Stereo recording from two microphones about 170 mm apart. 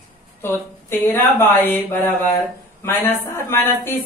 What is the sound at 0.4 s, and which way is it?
A woman's voice, 15° left (ahead or behind).